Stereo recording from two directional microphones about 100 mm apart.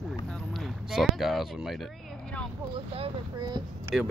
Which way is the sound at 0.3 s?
Centre (ahead or behind).